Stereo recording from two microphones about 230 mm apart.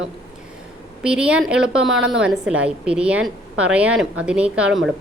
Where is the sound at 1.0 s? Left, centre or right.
Centre.